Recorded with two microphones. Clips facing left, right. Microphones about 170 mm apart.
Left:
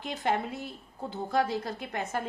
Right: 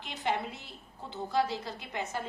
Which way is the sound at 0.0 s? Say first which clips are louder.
Left 3 dB; 50° left (ahead or behind).